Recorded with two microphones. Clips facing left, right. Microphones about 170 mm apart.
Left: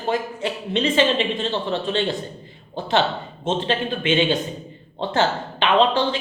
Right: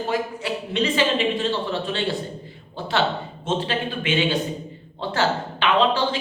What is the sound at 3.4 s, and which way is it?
A man's voice, 25° left (ahead or behind).